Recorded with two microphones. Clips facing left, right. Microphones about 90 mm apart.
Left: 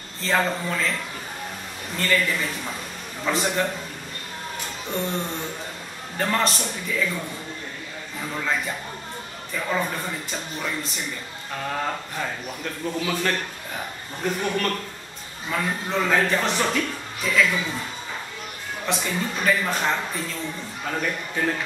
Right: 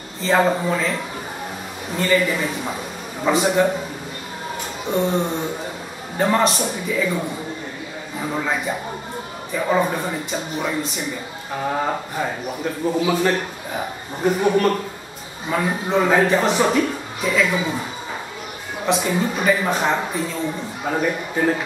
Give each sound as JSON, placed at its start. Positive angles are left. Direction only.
{"t": 0.4, "sound": "speech", "side_deg": -15}
{"t": 2.0, "sound": "a man's voice", "side_deg": -5}
{"t": 5.1, "sound": "speech", "side_deg": -35}
{"t": 6.1, "sound": "speech", "side_deg": -5}
{"t": 8.2, "sound": "speech", "side_deg": -15}
{"t": 18.9, "sound": "speech", "side_deg": -5}